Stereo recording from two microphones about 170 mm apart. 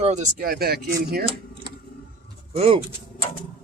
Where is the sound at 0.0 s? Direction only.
45° right (ahead or behind); by 1.2 s 70° right (ahead or behind).